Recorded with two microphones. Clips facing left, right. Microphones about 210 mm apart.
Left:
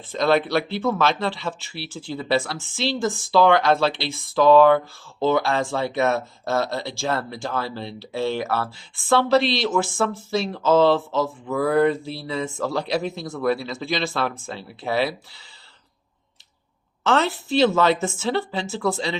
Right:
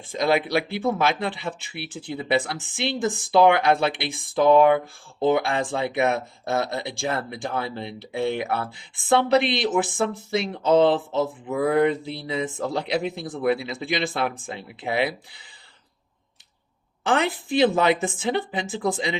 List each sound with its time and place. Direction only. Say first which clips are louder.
0.1 s speech: left 2 dB; 10° right (ahead or behind)
17.1 s speech: left 2 dB; 15° right (ahead or behind)